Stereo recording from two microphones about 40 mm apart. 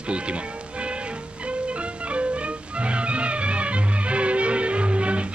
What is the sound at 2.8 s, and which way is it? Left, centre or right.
Music, right.